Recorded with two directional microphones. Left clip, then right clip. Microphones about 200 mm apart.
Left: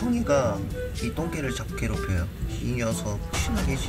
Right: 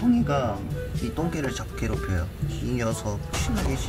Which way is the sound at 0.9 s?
Centre (ahead or behind).